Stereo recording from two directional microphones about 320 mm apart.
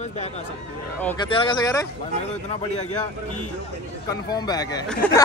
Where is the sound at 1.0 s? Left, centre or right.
Centre.